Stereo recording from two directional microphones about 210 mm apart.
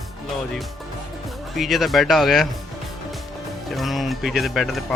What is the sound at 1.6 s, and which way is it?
Speech, centre (ahead or behind).